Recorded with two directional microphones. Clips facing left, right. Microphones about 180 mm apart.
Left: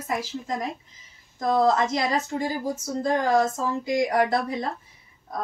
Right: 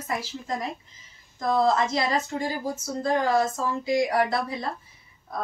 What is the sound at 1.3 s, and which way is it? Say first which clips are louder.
A woman's voice: left 1 dB; 15° left (ahead or behind).